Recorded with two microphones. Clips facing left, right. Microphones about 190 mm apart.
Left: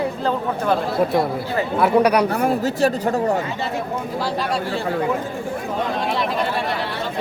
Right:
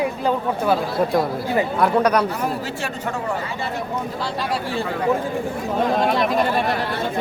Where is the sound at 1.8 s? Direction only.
10° left (ahead or behind).